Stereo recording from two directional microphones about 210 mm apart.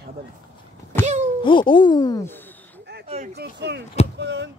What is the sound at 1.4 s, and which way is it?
Speech, 25° left (ahead or behind).